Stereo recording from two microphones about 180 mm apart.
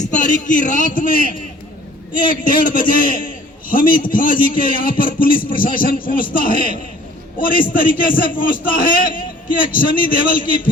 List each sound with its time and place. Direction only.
0.0 s a man's voice: 45° left (ahead or behind)